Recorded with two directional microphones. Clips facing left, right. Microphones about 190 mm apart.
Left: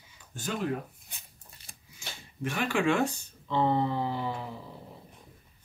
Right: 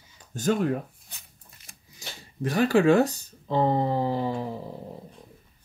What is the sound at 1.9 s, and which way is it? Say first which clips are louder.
Speech: right 4 dB; 40° right (ahead or behind).